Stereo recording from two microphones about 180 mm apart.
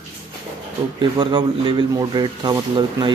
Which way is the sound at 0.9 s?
25° right (ahead or behind).